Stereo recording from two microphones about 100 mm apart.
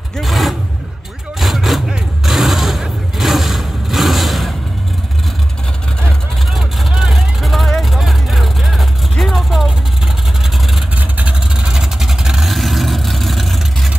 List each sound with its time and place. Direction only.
0.2 s vehicle: centre (ahead or behind)
1.4 s a sound: centre (ahead or behind)
6.0 s vehicle: centre (ahead or behind)
11.0 s vehicle: 15° right (ahead or behind)